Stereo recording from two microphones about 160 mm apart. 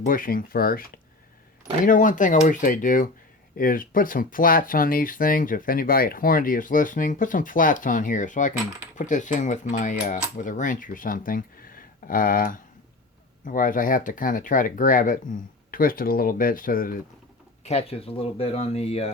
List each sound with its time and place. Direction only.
0.0 s speech: 60° left (ahead or behind)
1.8 s speech: 55° left (ahead or behind)
17.6 s speech: 40° left (ahead or behind)